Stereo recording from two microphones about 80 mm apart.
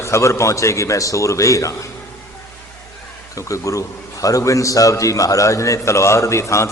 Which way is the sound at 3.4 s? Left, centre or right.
Left.